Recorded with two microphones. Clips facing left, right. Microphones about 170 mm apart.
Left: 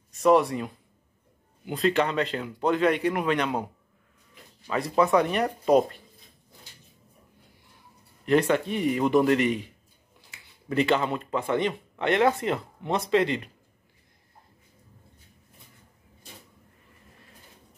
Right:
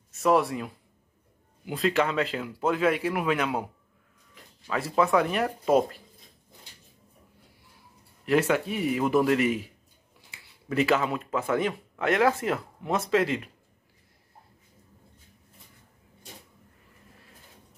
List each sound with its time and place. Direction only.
0.1 s speech: centre (ahead or behind)
1.7 s speech: centre (ahead or behind)
4.6 s speech: centre (ahead or behind)
8.3 s speech: 5° right (ahead or behind)
10.7 s speech: 5° right (ahead or behind)